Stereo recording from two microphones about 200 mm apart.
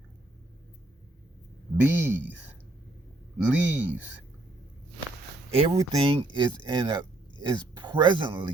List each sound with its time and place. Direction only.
1.9 s speech: 10° right (ahead or behind)
3.4 s speech: 10° right (ahead or behind)
5.5 s speech: 30° right (ahead or behind)